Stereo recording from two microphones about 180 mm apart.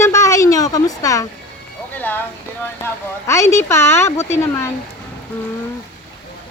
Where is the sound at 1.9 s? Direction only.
10° left (ahead or behind).